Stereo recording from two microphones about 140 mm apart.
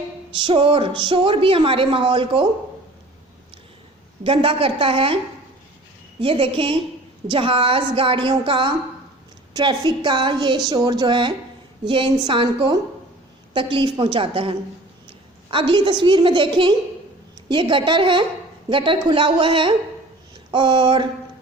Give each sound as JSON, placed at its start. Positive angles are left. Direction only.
{"t": 0.3, "sound": "a woman's voice", "side_deg": -35}
{"t": 4.2, "sound": "a woman's voice", "side_deg": -40}